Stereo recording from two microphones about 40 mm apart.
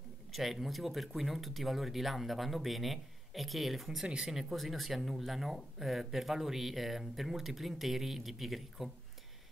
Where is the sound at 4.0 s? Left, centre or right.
Centre.